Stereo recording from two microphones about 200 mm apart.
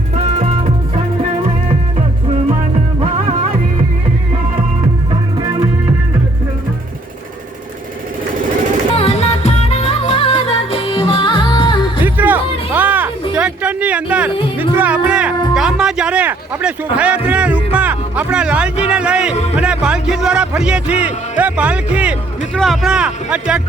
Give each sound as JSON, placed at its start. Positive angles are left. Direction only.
{"t": 9.0, "sound": "music", "side_deg": 30}
{"t": 12.0, "sound": "music", "side_deg": -10}
{"t": 13.3, "sound": "a sound", "side_deg": -5}
{"t": 14.6, "sound": "music", "side_deg": -10}
{"t": 19.5, "sound": "a man's voice", "side_deg": -5}